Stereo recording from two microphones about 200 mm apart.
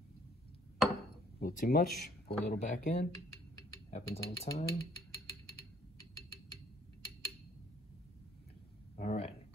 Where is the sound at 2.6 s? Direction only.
35° left (ahead or behind).